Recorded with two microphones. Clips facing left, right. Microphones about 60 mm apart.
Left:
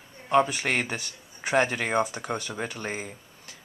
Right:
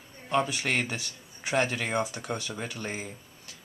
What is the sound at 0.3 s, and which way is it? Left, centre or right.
Speech, centre.